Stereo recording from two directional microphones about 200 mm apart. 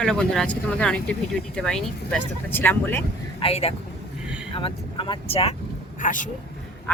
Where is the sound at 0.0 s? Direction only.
Centre (ahead or behind).